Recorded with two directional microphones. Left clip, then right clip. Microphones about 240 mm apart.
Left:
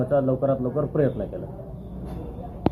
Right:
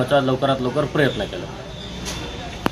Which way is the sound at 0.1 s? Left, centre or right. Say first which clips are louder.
Right 3 dB; centre.